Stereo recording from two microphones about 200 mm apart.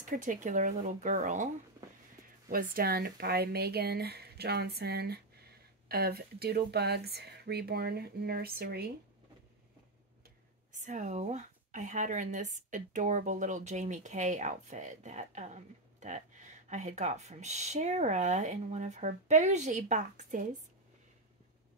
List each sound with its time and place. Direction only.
0.0 s speech: 40° right (ahead or behind)
2.5 s a woman's voice: 45° right (ahead or behind)
10.7 s speech: 40° right (ahead or behind)